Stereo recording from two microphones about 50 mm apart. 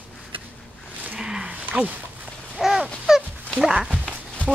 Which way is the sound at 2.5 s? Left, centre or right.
Centre.